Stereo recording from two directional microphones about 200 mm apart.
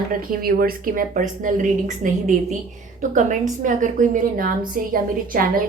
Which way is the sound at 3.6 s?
40° right (ahead or behind).